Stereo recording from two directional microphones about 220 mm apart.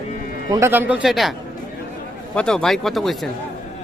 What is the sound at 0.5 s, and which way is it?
Speech, 10° right (ahead or behind).